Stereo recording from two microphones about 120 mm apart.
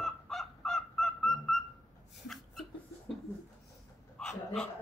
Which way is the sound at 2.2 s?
5° left (ahead or behind).